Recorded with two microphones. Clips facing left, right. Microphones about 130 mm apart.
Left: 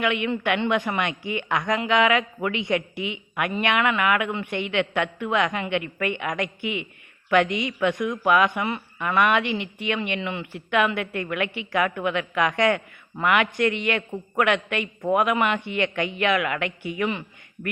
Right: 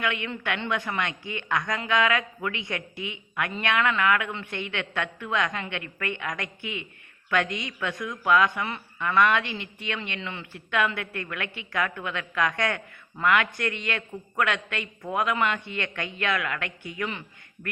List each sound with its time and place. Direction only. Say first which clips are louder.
0.0 s a woman's voice: left 6 dB; 15° left (ahead or behind)